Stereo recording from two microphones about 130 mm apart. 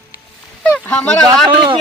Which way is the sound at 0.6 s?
10° left (ahead or behind).